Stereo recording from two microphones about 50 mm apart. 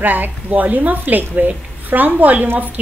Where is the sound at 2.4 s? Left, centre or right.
Right.